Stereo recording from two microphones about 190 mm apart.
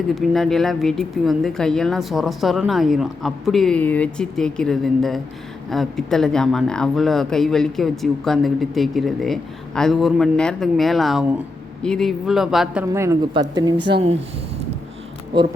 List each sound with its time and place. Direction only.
0.1 s speech: centre (ahead or behind)
12.8 s speech: 15° right (ahead or behind)